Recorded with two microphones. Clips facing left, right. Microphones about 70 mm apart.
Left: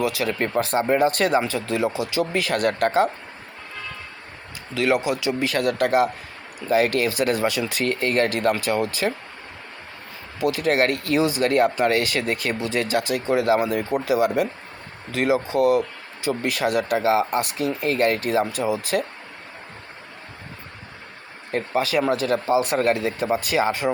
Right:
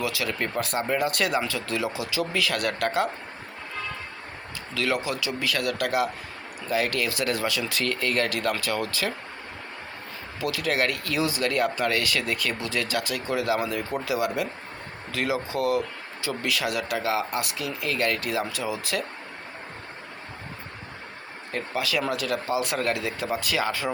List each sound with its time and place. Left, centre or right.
0.0 s speech: left
4.7 s speech: centre
5.4 s speech: left
7.3 s speech: left
10.4 s speech: left
14.0 s speech: left
15.5 s speech: centre
16.2 s speech: left
21.5 s speech: left